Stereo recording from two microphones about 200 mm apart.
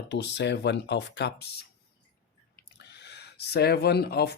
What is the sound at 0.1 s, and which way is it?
Speech, 60° left (ahead or behind).